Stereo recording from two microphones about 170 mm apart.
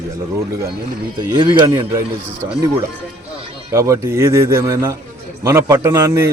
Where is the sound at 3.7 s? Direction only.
15° right (ahead or behind).